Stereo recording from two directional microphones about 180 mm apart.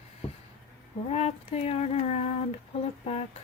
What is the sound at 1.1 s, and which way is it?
A woman's voice, 35° left (ahead or behind).